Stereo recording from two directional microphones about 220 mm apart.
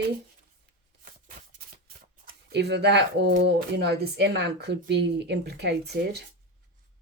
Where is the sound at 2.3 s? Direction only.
50° right (ahead or behind).